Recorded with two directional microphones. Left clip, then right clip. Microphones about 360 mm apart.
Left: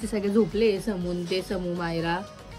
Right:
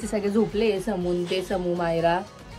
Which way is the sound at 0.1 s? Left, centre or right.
Centre.